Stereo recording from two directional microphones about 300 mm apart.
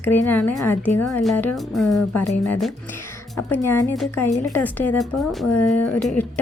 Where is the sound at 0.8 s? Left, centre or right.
Left.